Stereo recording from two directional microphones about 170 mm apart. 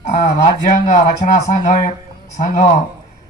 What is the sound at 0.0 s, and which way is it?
Speech, 45° left (ahead or behind).